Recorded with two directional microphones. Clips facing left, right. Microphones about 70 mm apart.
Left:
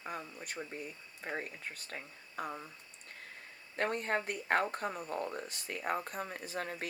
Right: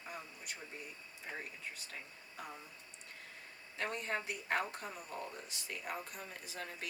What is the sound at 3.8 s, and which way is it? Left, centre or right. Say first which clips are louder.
Speech: left 6 dB; left.